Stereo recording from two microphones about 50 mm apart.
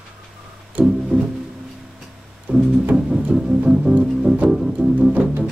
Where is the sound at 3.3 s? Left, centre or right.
Centre.